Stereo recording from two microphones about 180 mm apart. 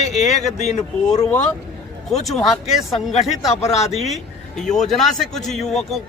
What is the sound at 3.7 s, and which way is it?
Speech, 35° left (ahead or behind).